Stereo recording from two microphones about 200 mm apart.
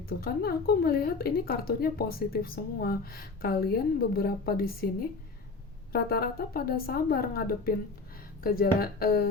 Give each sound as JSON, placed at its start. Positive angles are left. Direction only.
{"t": 0.1, "sound": "a woman's voice", "side_deg": 50}